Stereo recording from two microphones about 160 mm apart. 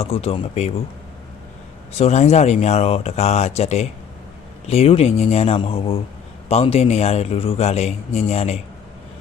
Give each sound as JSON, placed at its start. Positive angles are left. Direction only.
{"t": 0.0, "sound": "a man's voice", "side_deg": 40}
{"t": 2.0, "sound": "a man's voice", "side_deg": 40}